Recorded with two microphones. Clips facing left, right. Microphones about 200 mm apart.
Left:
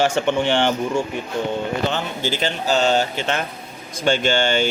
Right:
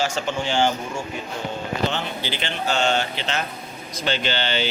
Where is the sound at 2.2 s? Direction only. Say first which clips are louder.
Left 4 dB; 40° left (ahead or behind).